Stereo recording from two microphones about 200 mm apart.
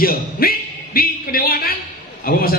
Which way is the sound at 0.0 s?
50° left (ahead or behind).